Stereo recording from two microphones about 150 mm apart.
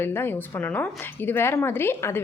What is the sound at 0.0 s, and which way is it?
A woman's voice, 15° left (ahead or behind).